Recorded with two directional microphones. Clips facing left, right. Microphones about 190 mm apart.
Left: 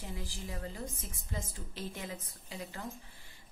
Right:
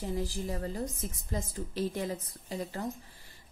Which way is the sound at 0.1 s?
40° right (ahead or behind).